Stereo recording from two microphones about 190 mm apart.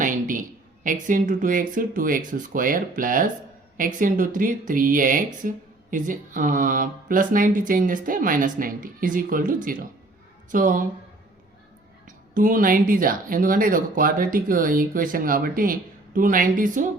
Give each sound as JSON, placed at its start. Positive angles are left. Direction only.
{"t": 0.0, "sound": "a sound", "side_deg": -45}
{"t": 1.0, "sound": "speech", "side_deg": -45}
{"t": 12.0, "sound": "speech", "side_deg": -45}